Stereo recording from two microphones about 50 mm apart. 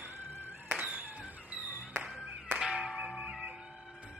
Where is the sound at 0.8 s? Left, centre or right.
Right.